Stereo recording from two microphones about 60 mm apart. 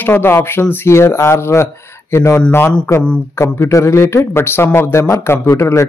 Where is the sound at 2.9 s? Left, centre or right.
Left.